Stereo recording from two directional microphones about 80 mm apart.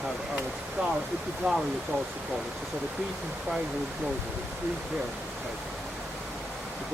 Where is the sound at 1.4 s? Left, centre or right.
Centre.